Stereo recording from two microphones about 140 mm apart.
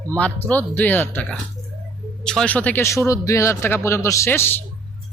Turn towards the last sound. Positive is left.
turn(degrees=15)  # may be behind; listen again after turning